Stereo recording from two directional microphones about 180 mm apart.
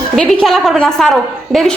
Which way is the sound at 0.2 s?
Centre (ahead or behind).